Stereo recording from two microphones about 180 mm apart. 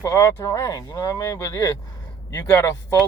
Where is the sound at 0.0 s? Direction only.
20° left (ahead or behind).